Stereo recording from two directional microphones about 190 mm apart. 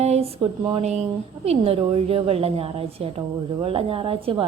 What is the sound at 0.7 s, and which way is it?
A woman's voice, 35° right (ahead or behind).